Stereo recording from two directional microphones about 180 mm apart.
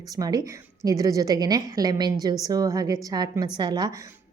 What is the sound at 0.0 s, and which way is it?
A woman's voice, 20° right (ahead or behind).